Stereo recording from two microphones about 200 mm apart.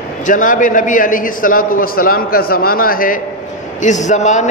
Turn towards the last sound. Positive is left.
turn(degrees=35)  # may be behind; listen again after turning